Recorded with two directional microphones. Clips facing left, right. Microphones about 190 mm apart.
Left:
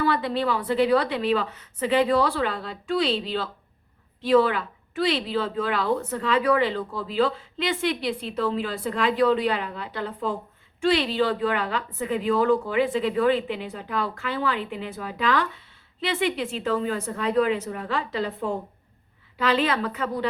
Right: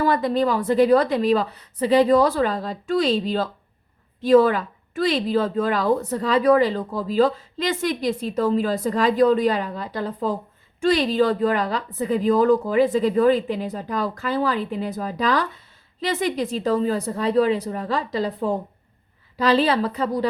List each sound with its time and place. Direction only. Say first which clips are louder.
0.0 s a woman's voice: right 4 dB; 45° right (ahead or behind)